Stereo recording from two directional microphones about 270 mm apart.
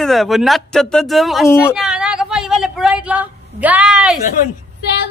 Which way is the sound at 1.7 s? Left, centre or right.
Centre.